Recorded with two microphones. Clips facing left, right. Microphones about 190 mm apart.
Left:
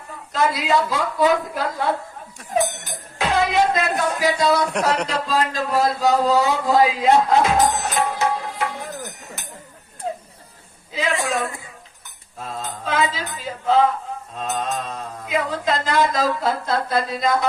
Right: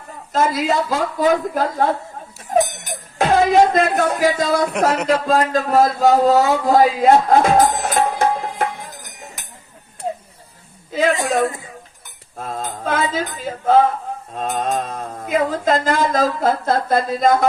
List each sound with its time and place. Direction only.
0.3 s mantra: 45° right (ahead or behind)
3.2 s a man's voice: 50° right (ahead or behind)
10.9 s a woman's voice: 45° right (ahead or behind)
12.4 s mantra: 50° right (ahead or behind)